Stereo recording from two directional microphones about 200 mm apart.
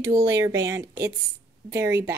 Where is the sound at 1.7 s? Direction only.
15° right (ahead or behind).